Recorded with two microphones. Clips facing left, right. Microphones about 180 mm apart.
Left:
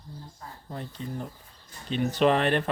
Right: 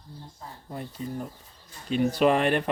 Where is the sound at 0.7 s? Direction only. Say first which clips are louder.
Right 2 dB; 10° right (ahead or behind).